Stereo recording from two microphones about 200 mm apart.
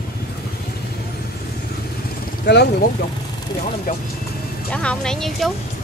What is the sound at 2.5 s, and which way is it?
Speech, 60° left (ahead or behind).